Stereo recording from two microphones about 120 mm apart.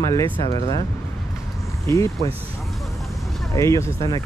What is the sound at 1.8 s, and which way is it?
Speech, 25° left (ahead or behind).